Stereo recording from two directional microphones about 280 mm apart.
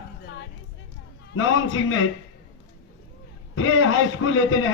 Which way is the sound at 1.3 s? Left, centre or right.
Left.